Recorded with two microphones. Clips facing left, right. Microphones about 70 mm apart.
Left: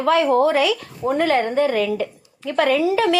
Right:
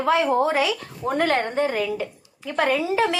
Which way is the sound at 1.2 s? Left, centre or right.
Right.